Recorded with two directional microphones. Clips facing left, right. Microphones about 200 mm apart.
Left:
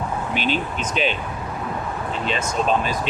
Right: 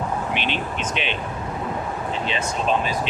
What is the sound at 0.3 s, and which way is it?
Speech, 40° left (ahead or behind).